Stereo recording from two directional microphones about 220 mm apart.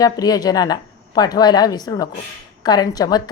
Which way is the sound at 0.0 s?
15° left (ahead or behind).